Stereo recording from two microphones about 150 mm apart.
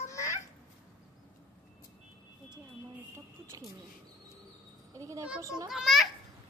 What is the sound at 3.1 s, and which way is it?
Speech, 20° right (ahead or behind).